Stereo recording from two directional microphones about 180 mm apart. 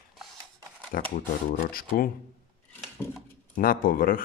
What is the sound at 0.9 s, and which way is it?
Speech, 55° left (ahead or behind).